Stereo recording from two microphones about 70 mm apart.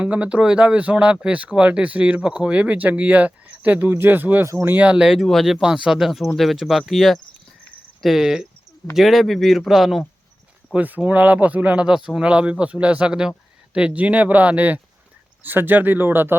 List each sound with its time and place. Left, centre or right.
0.0 s speech: centre
5.5 s speech: centre
10.8 s speech: right
11.9 s speech: centre; by 16.3 s right